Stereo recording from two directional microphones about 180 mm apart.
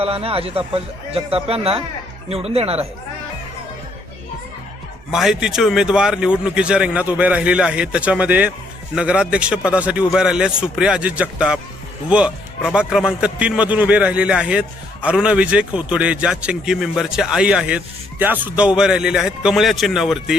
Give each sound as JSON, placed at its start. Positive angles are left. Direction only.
{"t": 0.0, "sound": "speech", "side_deg": -35}
{"t": 5.1, "sound": "a man's voice", "side_deg": -5}